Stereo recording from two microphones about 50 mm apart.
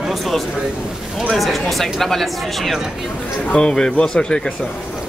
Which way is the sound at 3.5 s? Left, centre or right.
Centre.